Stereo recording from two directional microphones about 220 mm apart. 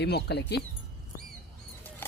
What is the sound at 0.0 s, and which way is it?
Speech, 50° left (ahead or behind).